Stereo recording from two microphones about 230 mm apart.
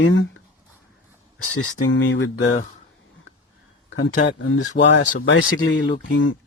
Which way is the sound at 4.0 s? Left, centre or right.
Left.